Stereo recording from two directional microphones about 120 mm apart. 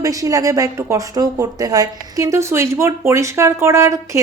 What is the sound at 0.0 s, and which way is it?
Speech, 30° right (ahead or behind).